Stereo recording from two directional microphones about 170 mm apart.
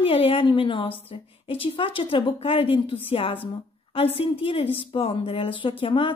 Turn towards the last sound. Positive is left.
turn(degrees=30)  # may be behind; listen again after turning